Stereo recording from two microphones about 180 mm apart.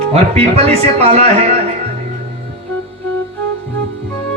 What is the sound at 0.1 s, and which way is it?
Speech, 35° right (ahead or behind).